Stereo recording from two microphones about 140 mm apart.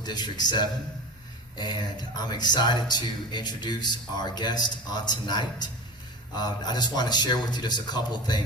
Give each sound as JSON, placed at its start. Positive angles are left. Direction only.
{"t": 0.0, "sound": "speech", "side_deg": 30}